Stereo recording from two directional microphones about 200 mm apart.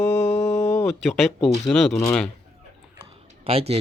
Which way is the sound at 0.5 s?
15° left (ahead or behind).